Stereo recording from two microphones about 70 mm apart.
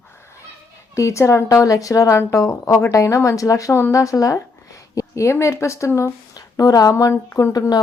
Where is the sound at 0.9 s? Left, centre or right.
Left.